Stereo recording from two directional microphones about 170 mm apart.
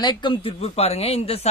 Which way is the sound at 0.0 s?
30° left (ahead or behind).